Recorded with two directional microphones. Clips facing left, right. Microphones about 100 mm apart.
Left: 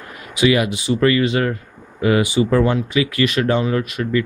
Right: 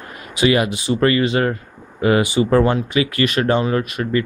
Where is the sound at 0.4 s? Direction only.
40° right (ahead or behind).